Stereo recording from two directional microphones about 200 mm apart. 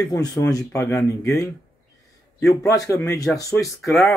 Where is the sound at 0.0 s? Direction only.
20° left (ahead or behind).